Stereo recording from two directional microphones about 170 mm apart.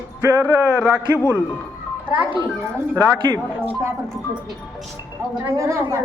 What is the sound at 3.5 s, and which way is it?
Speech, 15° right (ahead or behind).